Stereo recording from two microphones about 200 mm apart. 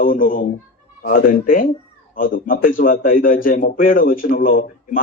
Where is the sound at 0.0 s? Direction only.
45° left (ahead or behind).